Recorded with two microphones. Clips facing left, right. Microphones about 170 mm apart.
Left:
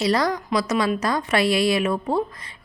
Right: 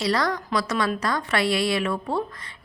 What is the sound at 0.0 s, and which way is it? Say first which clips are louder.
A woman's voice: left 3 dB; 20° left (ahead or behind).